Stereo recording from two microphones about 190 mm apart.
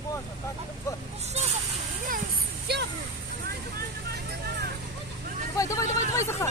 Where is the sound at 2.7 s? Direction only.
60° right (ahead or behind).